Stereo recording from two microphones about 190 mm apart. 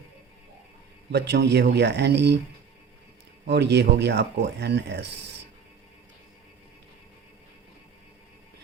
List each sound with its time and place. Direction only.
1.1 s speech: 60° right (ahead or behind)
3.4 s speech: 65° right (ahead or behind)